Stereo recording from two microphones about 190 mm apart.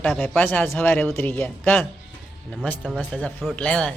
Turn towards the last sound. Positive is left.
turn(degrees=5)  # may be behind; listen again after turning